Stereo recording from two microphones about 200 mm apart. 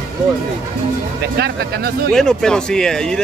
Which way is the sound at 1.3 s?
50° right (ahead or behind).